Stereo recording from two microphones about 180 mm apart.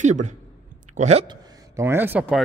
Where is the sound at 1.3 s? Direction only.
15° right (ahead or behind).